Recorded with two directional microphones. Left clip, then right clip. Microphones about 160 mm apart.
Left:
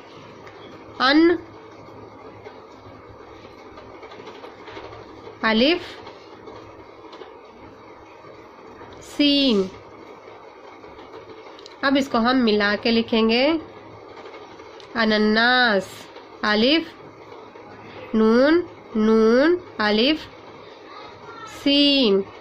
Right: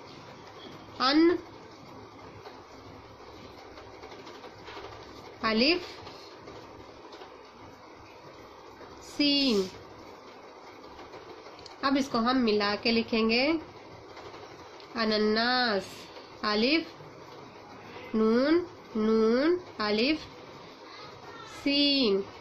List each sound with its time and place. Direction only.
0.9 s a woman's voice: 25° left (ahead or behind)
5.4 s a woman's voice: 25° left (ahead or behind)
9.2 s a woman's voice: 25° left (ahead or behind)
11.8 s a woman's voice: 25° left (ahead or behind)
15.0 s a woman's voice: 25° left (ahead or behind)
18.1 s speech: 25° left (ahead or behind)
21.6 s a woman's voice: 25° left (ahead or behind)